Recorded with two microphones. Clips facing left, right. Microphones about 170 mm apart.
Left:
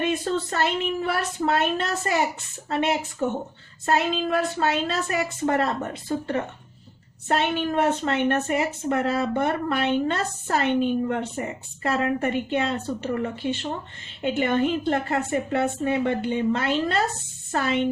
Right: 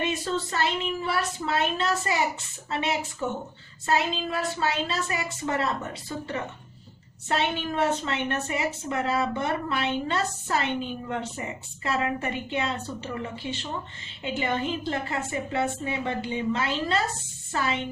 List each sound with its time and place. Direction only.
0.0 s a woman's voice: 55° left (ahead or behind)